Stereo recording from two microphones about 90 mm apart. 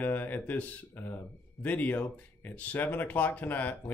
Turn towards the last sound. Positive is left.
turn(degrees=20)  # may be behind; listen again after turning